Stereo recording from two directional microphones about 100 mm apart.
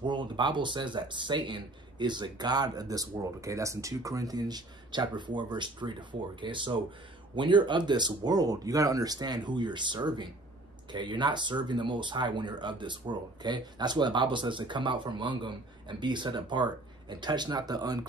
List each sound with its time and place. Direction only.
0.0 s speech: 50° right (ahead or behind)